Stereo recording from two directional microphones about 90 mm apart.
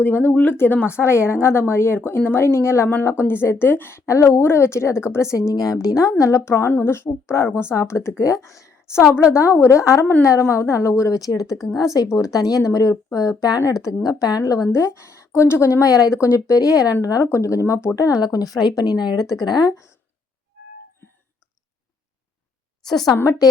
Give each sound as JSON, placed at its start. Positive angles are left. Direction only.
{"t": 0.0, "sound": "a woman's voice", "side_deg": 20}
{"t": 9.0, "sound": "a woman's voice", "side_deg": -10}
{"t": 9.3, "sound": "speech", "side_deg": 30}
{"t": 11.5, "sound": "speech", "side_deg": -5}
{"t": 12.1, "sound": "speech", "side_deg": 40}
{"t": 22.9, "sound": "speech", "side_deg": 5}
{"t": 23.1, "sound": "speech", "side_deg": 30}